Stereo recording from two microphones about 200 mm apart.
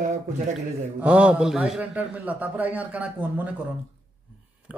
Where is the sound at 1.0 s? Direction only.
5° right (ahead or behind).